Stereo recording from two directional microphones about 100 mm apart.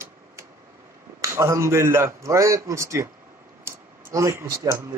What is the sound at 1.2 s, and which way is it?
A man's voice, 30° right (ahead or behind).